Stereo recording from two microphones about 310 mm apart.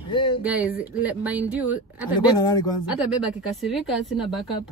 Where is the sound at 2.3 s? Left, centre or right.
Centre.